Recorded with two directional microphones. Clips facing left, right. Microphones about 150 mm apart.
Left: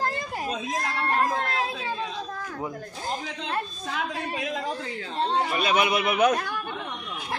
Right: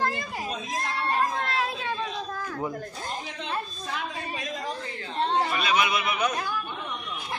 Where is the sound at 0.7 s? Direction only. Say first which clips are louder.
Even; 90° left.